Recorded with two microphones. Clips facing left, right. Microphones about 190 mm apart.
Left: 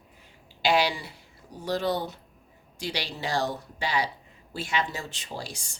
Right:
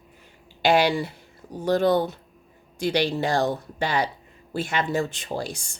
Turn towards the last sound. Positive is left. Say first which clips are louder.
# right 7 dB
turn(degrees=-50)  # may be behind; listen again after turning